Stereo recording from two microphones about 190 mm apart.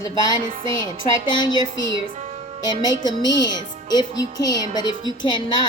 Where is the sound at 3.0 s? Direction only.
20° left (ahead or behind).